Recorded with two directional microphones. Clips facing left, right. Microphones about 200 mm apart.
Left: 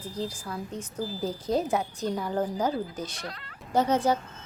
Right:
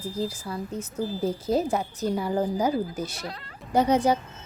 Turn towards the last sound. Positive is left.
turn(degrees=-15)  # may be behind; listen again after turning